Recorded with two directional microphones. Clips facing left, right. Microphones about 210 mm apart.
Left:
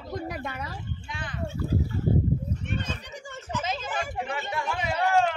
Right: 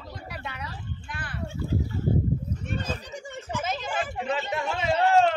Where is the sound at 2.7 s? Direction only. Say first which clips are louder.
Right 2 dB; 35° right (ahead or behind).